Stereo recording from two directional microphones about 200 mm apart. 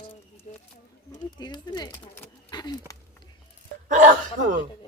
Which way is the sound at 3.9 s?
40° right (ahead or behind).